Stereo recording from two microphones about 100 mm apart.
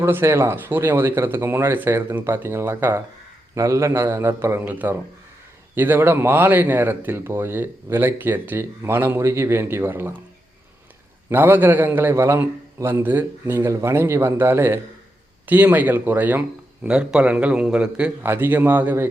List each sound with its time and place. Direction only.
0.0 s speech: 25° right (ahead or behind)
11.3 s a man's voice: 20° right (ahead or behind)
18.2 s speech: 20° right (ahead or behind)